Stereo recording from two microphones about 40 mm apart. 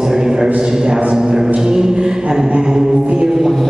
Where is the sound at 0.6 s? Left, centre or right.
Centre.